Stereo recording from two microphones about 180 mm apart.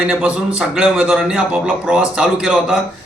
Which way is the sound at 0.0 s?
5° right (ahead or behind).